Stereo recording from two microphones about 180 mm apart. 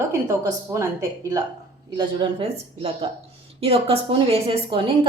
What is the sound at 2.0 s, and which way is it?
A woman's voice, 30° right (ahead or behind).